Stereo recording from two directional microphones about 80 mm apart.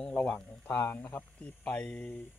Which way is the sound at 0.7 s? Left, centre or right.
Left.